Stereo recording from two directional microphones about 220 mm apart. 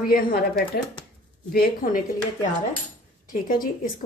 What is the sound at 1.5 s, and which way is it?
Speech, 40° left (ahead or behind).